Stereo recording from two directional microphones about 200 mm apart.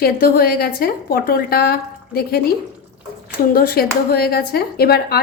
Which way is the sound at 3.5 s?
45° left (ahead or behind).